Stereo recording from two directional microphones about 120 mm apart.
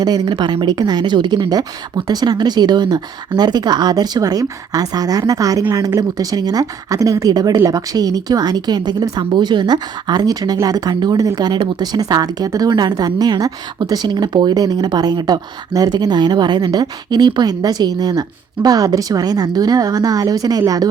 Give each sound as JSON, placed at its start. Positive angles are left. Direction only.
{"t": 0.0, "sound": "a woman's voice", "side_deg": -35}